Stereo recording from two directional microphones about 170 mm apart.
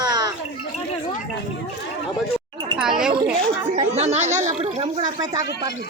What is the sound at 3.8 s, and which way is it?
Speech, 40° right (ahead or behind).